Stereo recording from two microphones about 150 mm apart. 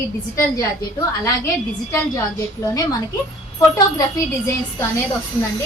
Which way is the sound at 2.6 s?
20° left (ahead or behind).